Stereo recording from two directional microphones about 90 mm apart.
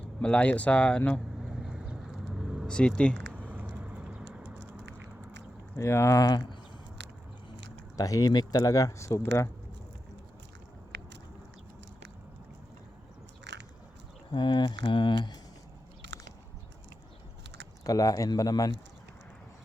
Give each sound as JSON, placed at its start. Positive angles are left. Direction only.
{"t": 0.0, "sound": "speech", "side_deg": 10}
{"t": 1.5, "sound": "vehicle", "side_deg": -5}
{"t": 2.6, "sound": "speech", "side_deg": 10}
{"t": 3.3, "sound": "vehicle", "side_deg": -20}
{"t": 5.7, "sound": "speech", "side_deg": 30}
{"t": 7.9, "sound": "speech", "side_deg": 40}
{"t": 14.3, "sound": "a sound", "side_deg": 55}
{"t": 17.8, "sound": "speech", "side_deg": 40}